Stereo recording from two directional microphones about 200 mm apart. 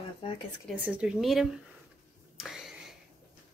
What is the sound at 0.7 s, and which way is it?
Speech, 5° right (ahead or behind).